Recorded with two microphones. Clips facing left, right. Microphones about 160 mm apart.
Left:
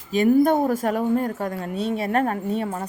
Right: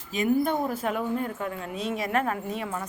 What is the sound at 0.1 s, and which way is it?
A woman's voice, 40° left (ahead or behind).